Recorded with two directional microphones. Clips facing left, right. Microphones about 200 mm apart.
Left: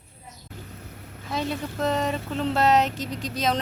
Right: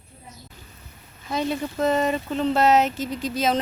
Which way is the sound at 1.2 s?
Centre (ahead or behind).